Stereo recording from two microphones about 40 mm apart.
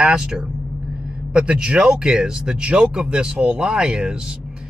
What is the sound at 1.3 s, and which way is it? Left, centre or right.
Speech, right.